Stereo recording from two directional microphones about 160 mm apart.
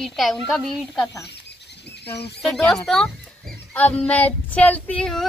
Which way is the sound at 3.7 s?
10° left (ahead or behind).